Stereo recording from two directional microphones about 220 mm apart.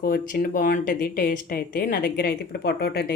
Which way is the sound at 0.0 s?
40° left (ahead or behind).